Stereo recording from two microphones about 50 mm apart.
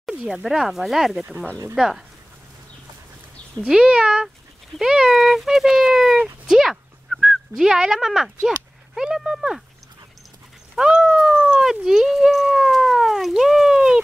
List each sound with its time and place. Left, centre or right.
0.3 s speech: centre
3.6 s speech: centre
10.8 s cat: centre
11.6 s speech: centre